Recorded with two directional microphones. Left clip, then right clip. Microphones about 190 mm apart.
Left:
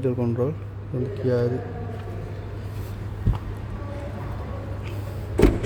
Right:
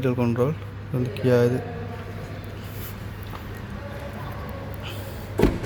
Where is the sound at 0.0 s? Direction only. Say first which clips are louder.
Right 1 dB; centre (ahead or behind).